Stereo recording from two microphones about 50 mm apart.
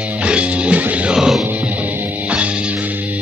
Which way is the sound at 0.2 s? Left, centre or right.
Right.